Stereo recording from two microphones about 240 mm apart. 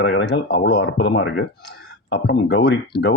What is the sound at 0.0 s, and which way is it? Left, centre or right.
A man's voice, left.